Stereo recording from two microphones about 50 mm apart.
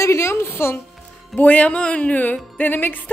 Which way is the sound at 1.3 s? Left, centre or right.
Left.